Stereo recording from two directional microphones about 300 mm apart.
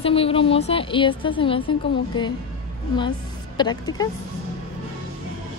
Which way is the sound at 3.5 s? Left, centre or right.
Centre.